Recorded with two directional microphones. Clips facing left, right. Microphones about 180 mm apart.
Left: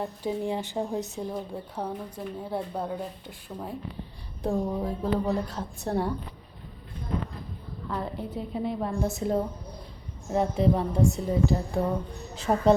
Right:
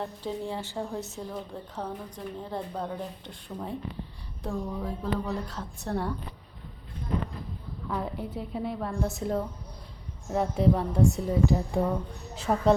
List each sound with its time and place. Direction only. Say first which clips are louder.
0.0 s a woman's voice: left 3 dB; 15° left (ahead or behind)
4.4 s speech: left 5 dB; 30° left (ahead or behind)
5.3 s a woman's voice: left 5 dB; 15° left (ahead or behind)
7.9 s a woman's voice: even; 5° right (ahead or behind)
12.3 s a woman's voice: left 2 dB; 5° right (ahead or behind)